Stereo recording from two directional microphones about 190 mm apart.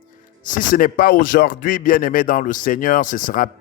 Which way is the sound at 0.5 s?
45° left (ahead or behind).